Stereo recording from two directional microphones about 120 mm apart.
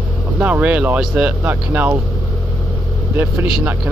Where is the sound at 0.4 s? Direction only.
10° right (ahead or behind).